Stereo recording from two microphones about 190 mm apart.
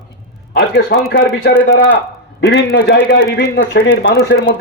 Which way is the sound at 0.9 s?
60° left (ahead or behind).